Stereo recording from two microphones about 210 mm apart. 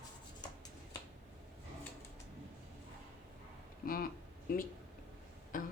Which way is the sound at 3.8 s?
45° left (ahead or behind).